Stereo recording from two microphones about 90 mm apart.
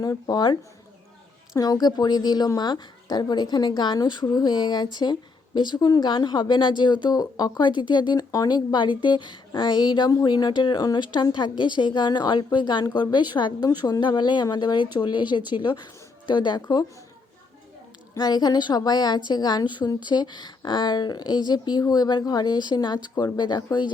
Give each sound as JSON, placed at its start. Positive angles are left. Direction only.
{"t": 0.0, "sound": "a woman's voice", "side_deg": 45}
{"t": 1.5, "sound": "a woman's voice", "side_deg": 45}
{"t": 13.7, "sound": "a woman's voice", "side_deg": 45}
{"t": 18.2, "sound": "a woman's voice", "side_deg": 50}